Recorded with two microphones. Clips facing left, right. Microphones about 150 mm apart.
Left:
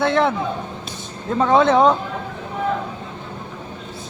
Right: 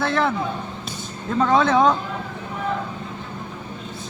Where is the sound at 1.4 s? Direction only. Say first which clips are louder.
Left 3 dB; 20° left (ahead or behind).